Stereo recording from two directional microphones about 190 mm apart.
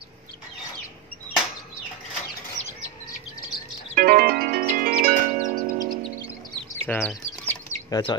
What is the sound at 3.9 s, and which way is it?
Music, 50° right (ahead or behind).